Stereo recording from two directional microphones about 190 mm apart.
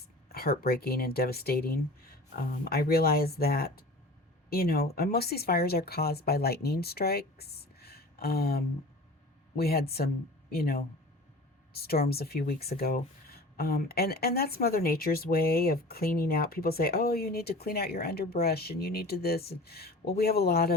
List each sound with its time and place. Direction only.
0.3 s speech: 55° left (ahead or behind)